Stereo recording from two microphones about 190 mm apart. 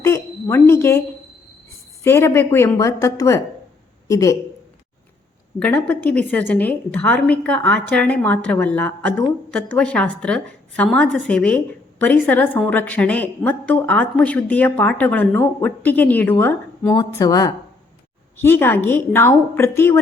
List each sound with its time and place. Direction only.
0.0 s a sound: 15° left (ahead or behind)
2.0 s a woman's voice: 15° left (ahead or behind)
5.5 s a woman's voice: 5° left (ahead or behind)